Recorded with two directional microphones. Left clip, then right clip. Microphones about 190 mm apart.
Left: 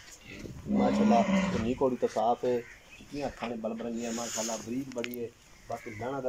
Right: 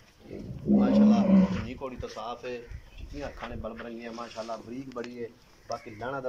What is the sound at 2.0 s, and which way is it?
Speech, 45° left (ahead or behind).